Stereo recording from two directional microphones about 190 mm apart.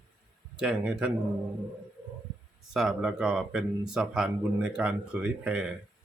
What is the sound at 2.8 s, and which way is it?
Speech, 5° right (ahead or behind).